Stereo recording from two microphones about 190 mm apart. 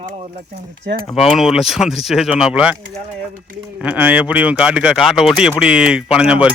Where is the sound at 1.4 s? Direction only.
Centre (ahead or behind).